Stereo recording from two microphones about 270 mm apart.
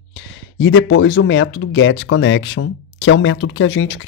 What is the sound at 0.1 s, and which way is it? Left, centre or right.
Speech, left.